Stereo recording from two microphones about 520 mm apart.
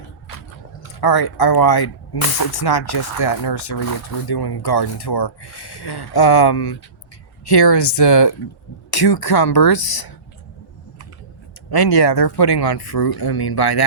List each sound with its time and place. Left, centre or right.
0.3 s speech: left
11.7 s speech: left